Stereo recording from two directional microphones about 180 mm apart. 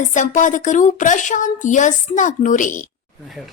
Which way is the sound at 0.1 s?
45° left (ahead or behind).